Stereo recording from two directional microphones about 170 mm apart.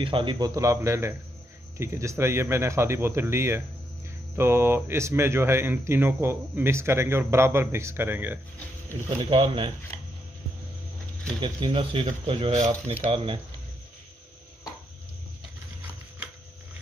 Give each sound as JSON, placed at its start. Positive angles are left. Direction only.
{"t": 0.0, "sound": "speech", "side_deg": -30}
{"t": 9.3, "sound": "speech", "side_deg": -30}
{"t": 9.9, "sound": "a sound", "side_deg": 10}
{"t": 11.4, "sound": "speech", "side_deg": -30}